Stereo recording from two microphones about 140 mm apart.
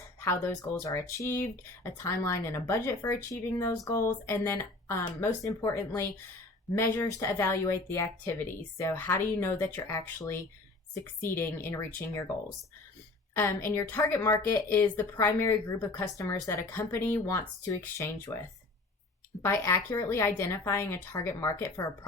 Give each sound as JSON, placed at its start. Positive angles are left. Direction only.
{"t": 0.2, "sound": "speech", "side_deg": 20}
{"t": 13.7, "sound": "speech", "side_deg": 20}
{"t": 19.4, "sound": "speech", "side_deg": 20}